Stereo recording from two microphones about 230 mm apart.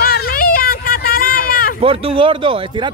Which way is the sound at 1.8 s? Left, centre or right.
Right.